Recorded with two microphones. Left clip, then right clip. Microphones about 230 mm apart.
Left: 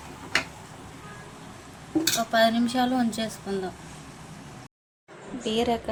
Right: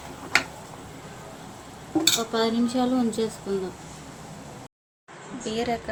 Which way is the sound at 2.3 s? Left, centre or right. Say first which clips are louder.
Left 3 dB; left.